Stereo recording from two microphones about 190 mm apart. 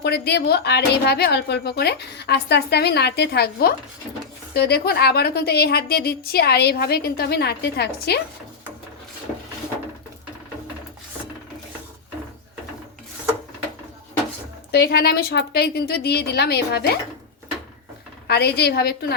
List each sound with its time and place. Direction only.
0.0 s speech: 60° left (ahead or behind)
14.7 s speech: 60° left (ahead or behind)
18.3 s speech: 60° left (ahead or behind)